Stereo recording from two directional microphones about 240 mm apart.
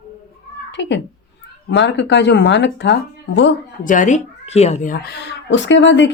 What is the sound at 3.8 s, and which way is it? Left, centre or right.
Speech, left.